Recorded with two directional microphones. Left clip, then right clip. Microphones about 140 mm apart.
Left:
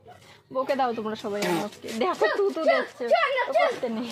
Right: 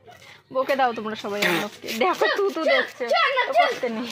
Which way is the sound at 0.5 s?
40° right (ahead or behind).